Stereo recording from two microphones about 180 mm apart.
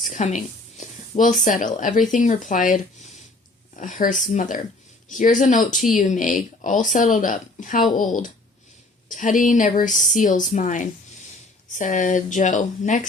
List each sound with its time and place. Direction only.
0.0 s speech: 40° left (ahead or behind)